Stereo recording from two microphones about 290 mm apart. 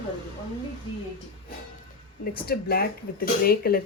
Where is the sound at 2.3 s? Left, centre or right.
Left.